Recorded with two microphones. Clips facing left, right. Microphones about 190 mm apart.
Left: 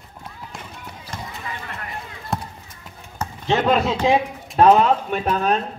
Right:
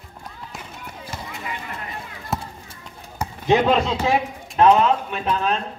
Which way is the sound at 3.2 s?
15° right (ahead or behind).